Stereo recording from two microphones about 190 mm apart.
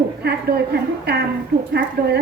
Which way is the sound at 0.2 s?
60° right (ahead or behind).